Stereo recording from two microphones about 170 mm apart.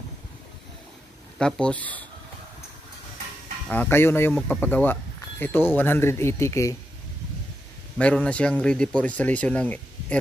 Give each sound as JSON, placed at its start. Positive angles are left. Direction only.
{"t": 1.4, "sound": "speech", "side_deg": 5}
{"t": 3.6, "sound": "speech", "side_deg": 10}
{"t": 8.0, "sound": "speech", "side_deg": 5}